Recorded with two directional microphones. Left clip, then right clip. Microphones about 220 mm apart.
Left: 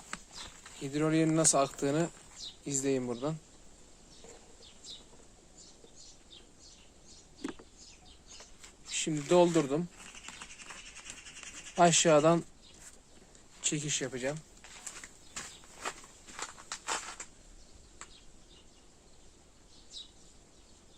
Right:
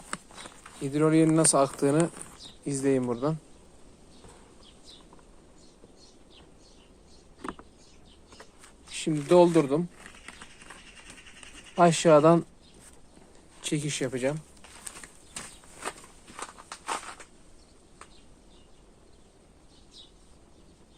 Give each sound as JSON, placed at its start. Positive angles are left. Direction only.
{"t": 0.8, "sound": "speech", "side_deg": -20}
{"t": 8.9, "sound": "speech", "side_deg": -15}
{"t": 11.7, "sound": "speech", "side_deg": -10}
{"t": 13.6, "sound": "speech", "side_deg": -15}